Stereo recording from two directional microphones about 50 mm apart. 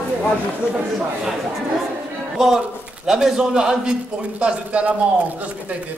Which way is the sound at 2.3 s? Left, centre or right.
Centre.